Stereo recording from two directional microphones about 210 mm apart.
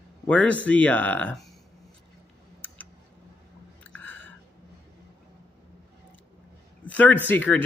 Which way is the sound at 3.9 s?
10° left (ahead or behind).